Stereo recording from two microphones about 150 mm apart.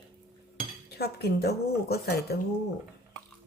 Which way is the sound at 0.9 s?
90° left.